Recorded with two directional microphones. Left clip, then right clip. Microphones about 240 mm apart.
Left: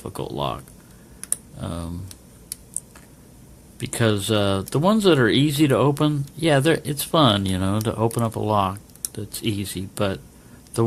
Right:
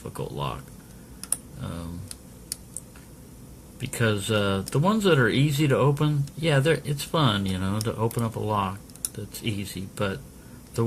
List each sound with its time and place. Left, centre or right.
0.0 s speech: left
1.6 s speech: left
3.8 s speech: left